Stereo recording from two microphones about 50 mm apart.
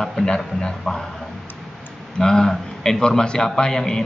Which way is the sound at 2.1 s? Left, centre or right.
Centre.